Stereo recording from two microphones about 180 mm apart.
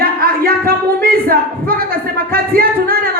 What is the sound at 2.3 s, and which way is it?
Speech, 55° right (ahead or behind).